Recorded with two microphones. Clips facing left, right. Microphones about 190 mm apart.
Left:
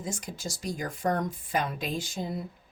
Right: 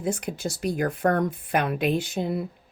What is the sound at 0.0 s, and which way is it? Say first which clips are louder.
Speech: right 8 dB; 60° right (ahead or behind).